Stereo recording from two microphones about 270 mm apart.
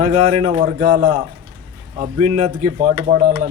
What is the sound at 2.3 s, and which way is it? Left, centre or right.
Speech, right.